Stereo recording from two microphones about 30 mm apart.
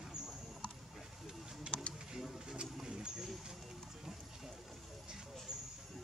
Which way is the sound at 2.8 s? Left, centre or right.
Right.